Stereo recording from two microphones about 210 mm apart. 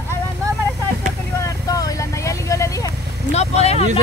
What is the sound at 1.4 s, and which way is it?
Vehicle, 15° left (ahead or behind).